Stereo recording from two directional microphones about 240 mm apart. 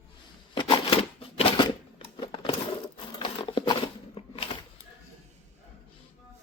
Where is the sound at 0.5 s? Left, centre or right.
Centre.